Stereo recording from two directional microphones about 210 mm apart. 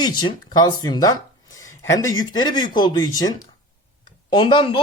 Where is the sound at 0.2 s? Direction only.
20° left (ahead or behind).